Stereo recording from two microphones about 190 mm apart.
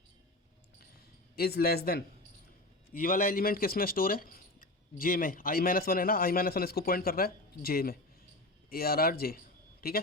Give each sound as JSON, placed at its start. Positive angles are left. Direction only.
{"t": 1.4, "sound": "a man's voice", "side_deg": 55}